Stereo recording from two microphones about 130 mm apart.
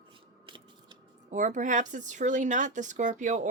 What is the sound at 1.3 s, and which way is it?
Speech, 75° right (ahead or behind).